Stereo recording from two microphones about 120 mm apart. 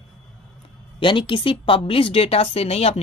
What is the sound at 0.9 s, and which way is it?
A woman's voice, 45° left (ahead or behind).